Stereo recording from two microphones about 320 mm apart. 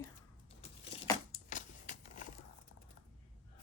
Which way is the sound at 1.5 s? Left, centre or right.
Left.